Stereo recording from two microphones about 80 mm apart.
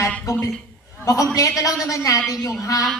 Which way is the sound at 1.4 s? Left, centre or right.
Left.